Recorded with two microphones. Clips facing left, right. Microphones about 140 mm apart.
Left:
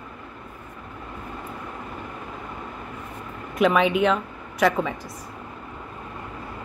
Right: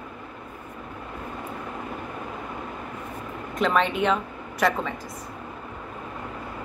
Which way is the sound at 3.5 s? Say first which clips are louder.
Left 4 dB; 5° left (ahead or behind).